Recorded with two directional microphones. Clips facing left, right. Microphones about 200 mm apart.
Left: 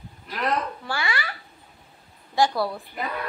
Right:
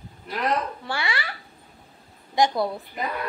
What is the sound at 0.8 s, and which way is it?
Speech, 25° right (ahead or behind).